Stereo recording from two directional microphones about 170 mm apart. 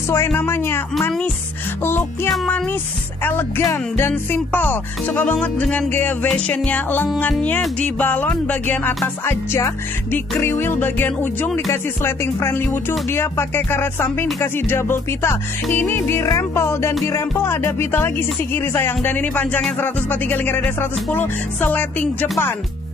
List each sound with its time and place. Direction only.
0.1 s speech: 15° left (ahead or behind)
2.2 s music: 5° left (ahead or behind)
3.3 s speech: 15° left (ahead or behind)